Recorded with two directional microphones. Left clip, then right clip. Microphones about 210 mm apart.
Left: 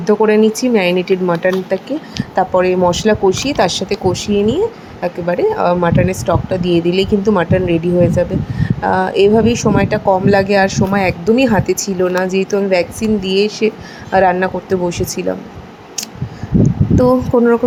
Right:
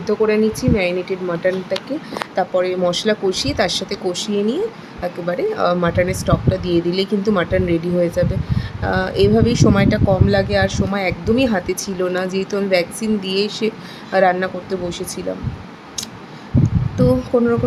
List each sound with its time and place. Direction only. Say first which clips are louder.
0.0 s a woman's voice: left 5 dB; 15° left (ahead or behind)
16.6 s speech: left 5 dB; 20° left (ahead or behind)